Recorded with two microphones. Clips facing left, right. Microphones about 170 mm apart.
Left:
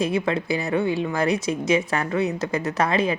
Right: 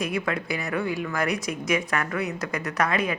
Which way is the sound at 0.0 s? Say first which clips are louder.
Left 5 dB; 25° left (ahead or behind).